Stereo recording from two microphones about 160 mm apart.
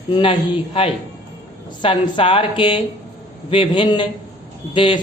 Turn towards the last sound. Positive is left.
turn(degrees=30)  # may be behind; listen again after turning